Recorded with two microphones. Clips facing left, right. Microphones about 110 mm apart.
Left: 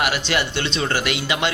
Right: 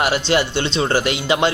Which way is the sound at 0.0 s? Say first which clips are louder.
Right 4 dB; 30° right (ahead or behind).